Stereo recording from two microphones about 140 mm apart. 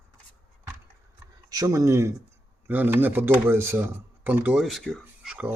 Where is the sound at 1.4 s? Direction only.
25° right (ahead or behind).